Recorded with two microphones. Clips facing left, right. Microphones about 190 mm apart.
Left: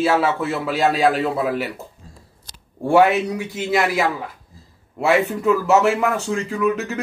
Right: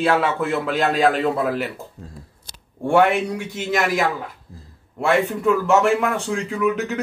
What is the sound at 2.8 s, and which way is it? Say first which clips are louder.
Speech: left 2 dB; 5° left (ahead or behind).